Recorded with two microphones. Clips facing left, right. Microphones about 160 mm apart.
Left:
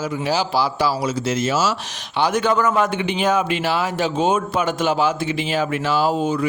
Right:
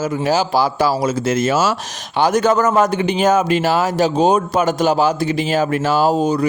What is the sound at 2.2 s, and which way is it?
Speech, 40° right (ahead or behind).